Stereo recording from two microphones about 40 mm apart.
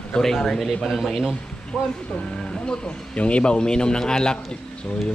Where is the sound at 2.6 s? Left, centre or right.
Left.